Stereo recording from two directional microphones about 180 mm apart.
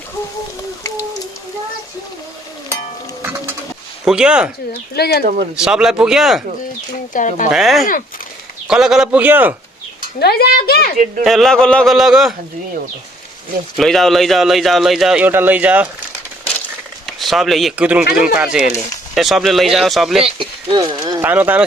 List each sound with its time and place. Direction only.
3.2 s music: 10° right (ahead or behind)
4.0 s a man's voice: 5° right (ahead or behind)
4.7 s speech: 65° left (ahead or behind)
5.5 s a man's voice: 5° right (ahead or behind)
7.1 s speech: 45° left (ahead or behind)
7.5 s a man's voice: centre (ahead or behind)
10.0 s speech: 60° left (ahead or behind)
11.2 s a man's voice: centre (ahead or behind)
13.7 s a man's voice: centre (ahead or behind)
17.1 s a man's voice: centre (ahead or behind)
20.2 s speech: 25° right (ahead or behind)
21.2 s speech: 10° right (ahead or behind)